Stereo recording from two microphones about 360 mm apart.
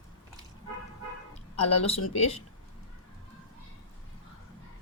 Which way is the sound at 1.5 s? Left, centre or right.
Centre.